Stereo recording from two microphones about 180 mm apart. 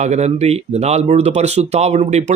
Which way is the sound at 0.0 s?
40° right (ahead or behind).